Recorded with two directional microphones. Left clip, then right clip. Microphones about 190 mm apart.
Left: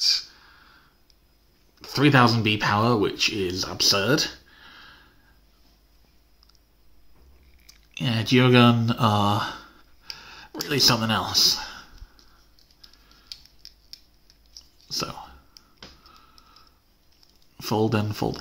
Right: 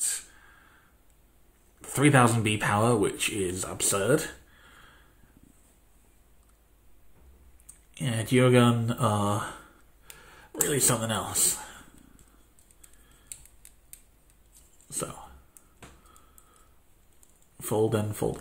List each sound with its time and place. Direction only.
0.3 s snort: 5° left (ahead or behind)
1.8 s speech: 10° left (ahead or behind)
7.9 s speech: 20° left (ahead or behind)
10.0 s a sound: 20° left (ahead or behind)
15.0 s speech: 20° left (ahead or behind)
17.7 s speech: 20° left (ahead or behind)